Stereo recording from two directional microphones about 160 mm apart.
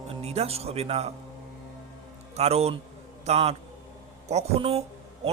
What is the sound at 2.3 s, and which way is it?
A man's voice, 40° right (ahead or behind).